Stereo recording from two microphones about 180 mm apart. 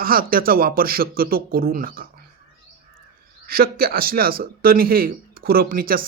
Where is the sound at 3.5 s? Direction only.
55° right (ahead or behind).